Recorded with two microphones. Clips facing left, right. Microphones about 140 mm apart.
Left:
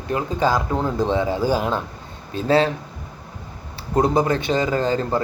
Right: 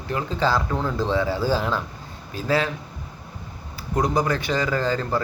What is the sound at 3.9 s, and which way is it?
Speech, 25° left (ahead or behind).